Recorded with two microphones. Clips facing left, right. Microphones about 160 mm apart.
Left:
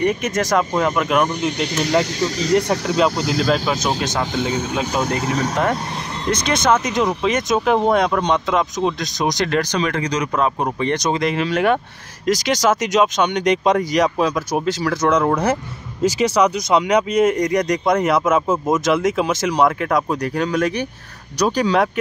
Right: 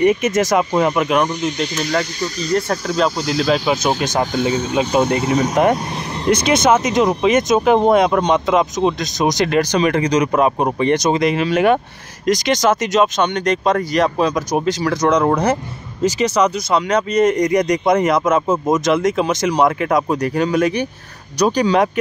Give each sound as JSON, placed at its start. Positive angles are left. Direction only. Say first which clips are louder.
{"t": 0.0, "sound": "speech", "louder": "right 5 dB", "side_deg": -5}
{"t": 1.4, "sound": "speech", "louder": "even", "side_deg": 65}
{"t": 2.1, "sound": "speech", "louder": "left 2 dB", "side_deg": 90}
{"t": 3.2, "sound": "speech", "louder": "right 1 dB", "side_deg": 55}
{"t": 3.4, "sound": "speech", "louder": "right 5 dB", "side_deg": -10}
{"t": 11.0, "sound": "speech", "louder": "right 3 dB", "side_deg": -5}
{"t": 14.5, "sound": "speech", "louder": "right 2 dB", "side_deg": 5}